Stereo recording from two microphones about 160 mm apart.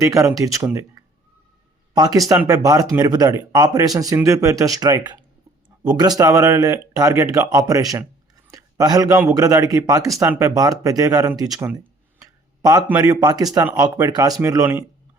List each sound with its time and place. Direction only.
0.0 s speech: 20° right (ahead or behind)
13.0 s speech: 25° right (ahead or behind)